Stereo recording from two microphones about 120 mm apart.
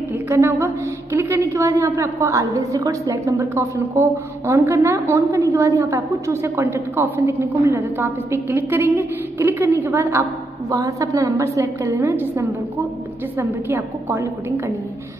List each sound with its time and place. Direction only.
0.3 s a woman's voice: 20° right (ahead or behind)